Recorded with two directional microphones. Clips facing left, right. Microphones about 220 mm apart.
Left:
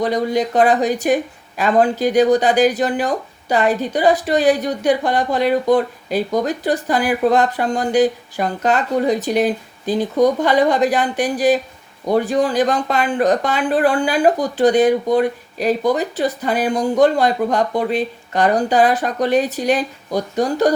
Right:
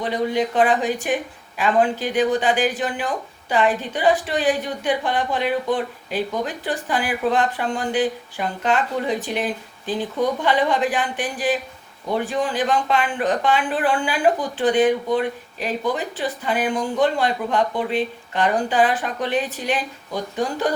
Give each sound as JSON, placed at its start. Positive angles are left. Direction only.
{"t": 0.0, "sound": "speech", "side_deg": 40}